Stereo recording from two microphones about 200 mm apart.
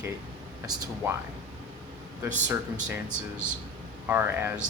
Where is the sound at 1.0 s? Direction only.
15° right (ahead or behind).